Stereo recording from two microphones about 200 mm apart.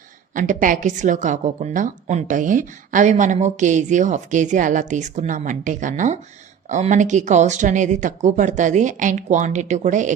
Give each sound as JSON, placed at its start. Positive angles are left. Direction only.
{"t": 0.3, "sound": "a woman's voice", "side_deg": -40}